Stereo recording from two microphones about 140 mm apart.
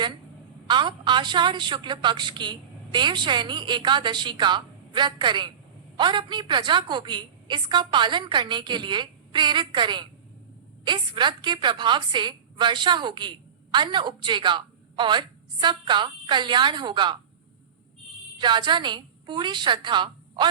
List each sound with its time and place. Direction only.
0.7 s a woman's voice: 35° right (ahead or behind)
18.3 s a woman's voice: 35° right (ahead or behind)